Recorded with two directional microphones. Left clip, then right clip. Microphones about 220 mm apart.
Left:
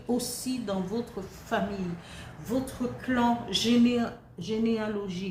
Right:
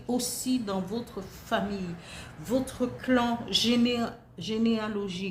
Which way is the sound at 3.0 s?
45° right (ahead or behind).